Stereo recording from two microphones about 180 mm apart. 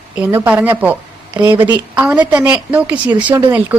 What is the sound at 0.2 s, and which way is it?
A woman's voice, 10° right (ahead or behind).